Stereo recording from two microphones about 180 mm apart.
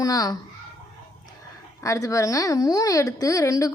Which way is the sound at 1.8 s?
15° left (ahead or behind).